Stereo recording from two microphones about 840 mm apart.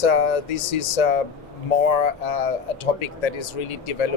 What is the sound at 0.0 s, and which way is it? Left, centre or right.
Speech, left.